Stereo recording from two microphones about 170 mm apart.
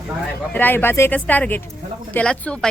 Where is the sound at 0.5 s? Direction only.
10° left (ahead or behind).